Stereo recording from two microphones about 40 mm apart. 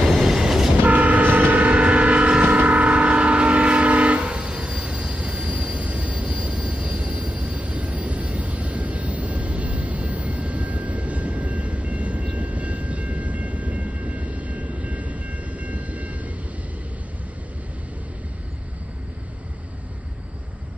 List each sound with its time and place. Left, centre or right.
0.0 s train: centre
0.8 s train: right
1.6 s vehicle: right
2.6 s train: right